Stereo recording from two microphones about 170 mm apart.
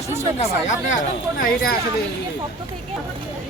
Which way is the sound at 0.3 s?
40° left (ahead or behind).